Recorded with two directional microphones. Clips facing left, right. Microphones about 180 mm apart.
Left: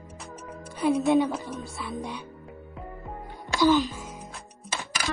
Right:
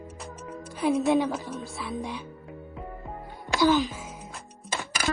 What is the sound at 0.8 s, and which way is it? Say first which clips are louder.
A woman's voice: left 1 dB; centre (ahead or behind).